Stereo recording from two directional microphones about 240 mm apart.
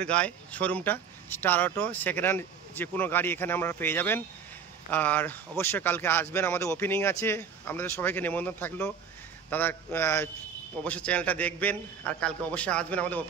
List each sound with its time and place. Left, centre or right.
0.0 s a man's voice: centre